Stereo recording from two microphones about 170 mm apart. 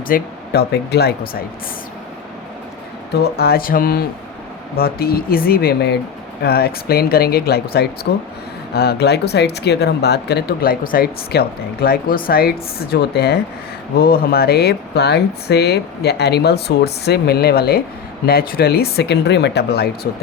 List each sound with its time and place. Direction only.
0.1 s speech: 70° left (ahead or behind)
3.3 s speech: 65° left (ahead or behind)
8.1 s speech: 80° left